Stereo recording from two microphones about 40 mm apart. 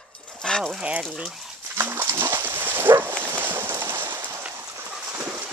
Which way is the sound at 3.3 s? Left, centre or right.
Right.